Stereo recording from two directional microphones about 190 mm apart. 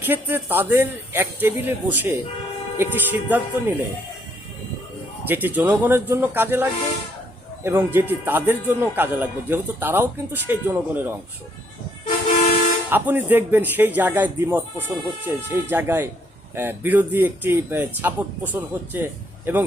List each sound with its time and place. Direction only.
0.0 s speech: 10° right (ahead or behind)
5.3 s speech: 10° right (ahead or behind)
12.0 s vehicle: 35° left (ahead or behind)
12.9 s speech: 10° right (ahead or behind)